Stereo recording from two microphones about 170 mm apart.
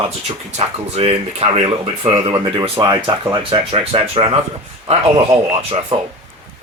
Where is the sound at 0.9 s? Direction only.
35° right (ahead or behind).